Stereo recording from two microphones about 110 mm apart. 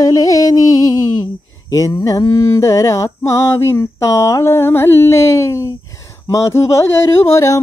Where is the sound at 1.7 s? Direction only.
30° left (ahead or behind).